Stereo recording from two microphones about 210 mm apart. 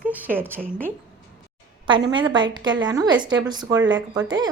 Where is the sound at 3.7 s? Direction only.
60° right (ahead or behind).